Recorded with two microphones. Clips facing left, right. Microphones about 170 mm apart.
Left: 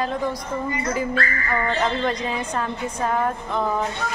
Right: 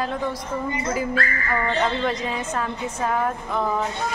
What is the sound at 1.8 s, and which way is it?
A woman's voice, centre (ahead or behind).